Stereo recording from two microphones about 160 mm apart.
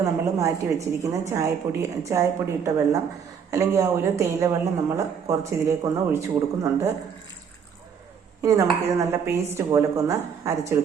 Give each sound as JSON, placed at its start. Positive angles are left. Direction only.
{"t": 0.0, "sound": "a woman's voice", "side_deg": -20}
{"t": 8.4, "sound": "a woman's voice", "side_deg": -20}